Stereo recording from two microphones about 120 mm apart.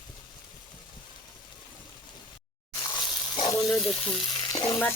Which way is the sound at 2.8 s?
40° left (ahead or behind).